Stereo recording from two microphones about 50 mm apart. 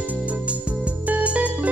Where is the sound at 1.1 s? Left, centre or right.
Right.